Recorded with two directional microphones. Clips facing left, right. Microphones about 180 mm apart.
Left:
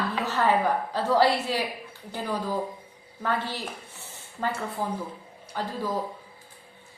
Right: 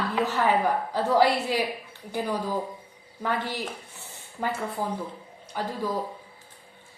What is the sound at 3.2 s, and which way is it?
A woman's voice, 15° right (ahead or behind).